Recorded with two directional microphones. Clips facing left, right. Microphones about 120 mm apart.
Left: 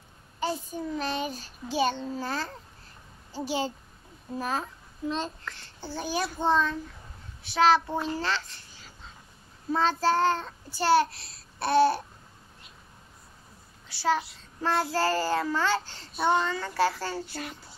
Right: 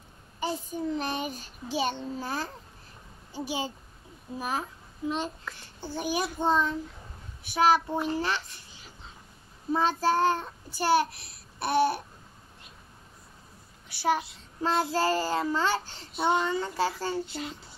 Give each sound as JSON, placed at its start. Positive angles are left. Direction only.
{"t": 0.4, "sound": "child singing", "side_deg": -15}
{"t": 8.0, "sound": "a child's voice", "side_deg": -15}
{"t": 9.7, "sound": "child singing", "side_deg": -15}
{"t": 13.8, "sound": "child singing", "side_deg": -20}